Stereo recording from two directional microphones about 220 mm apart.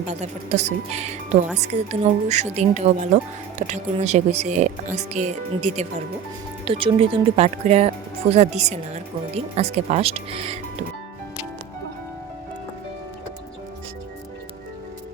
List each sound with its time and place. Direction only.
0.1 s speech: 30° right (ahead or behind)